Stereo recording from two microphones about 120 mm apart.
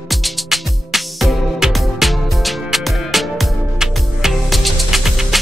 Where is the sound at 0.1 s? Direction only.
Centre (ahead or behind).